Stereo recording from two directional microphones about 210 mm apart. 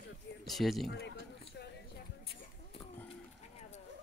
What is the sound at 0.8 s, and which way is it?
Speech, 50° left (ahead or behind).